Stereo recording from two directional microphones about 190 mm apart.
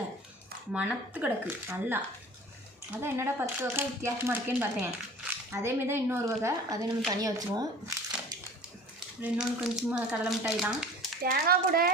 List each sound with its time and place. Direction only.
0.7 s speech: 10° right (ahead or behind)
9.0 s speech: 5° right (ahead or behind)
11.2 s a child's voice: 50° right (ahead or behind)